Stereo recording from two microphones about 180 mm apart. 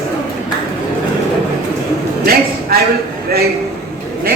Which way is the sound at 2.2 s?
55° right (ahead or behind).